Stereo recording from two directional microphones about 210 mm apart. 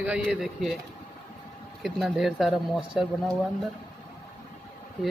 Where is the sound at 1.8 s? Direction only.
Centre (ahead or behind).